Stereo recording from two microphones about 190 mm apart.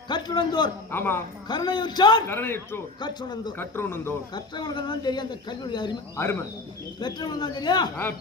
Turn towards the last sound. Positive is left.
turn(degrees=20)  # may be behind; listen again after turning